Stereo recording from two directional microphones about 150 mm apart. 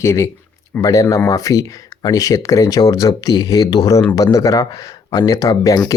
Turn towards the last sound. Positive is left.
turn(degrees=25)  # may be behind; listen again after turning